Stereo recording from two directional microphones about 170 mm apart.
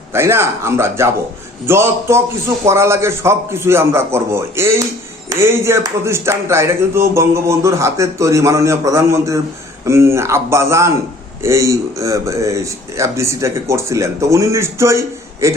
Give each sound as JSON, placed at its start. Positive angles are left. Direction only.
{"t": 0.1, "sound": "speech", "side_deg": -15}